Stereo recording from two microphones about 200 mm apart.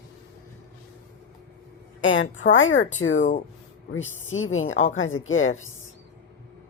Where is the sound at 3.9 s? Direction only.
75° left (ahead or behind).